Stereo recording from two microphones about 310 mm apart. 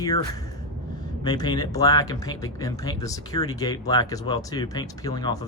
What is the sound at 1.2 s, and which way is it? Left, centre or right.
Speech, centre.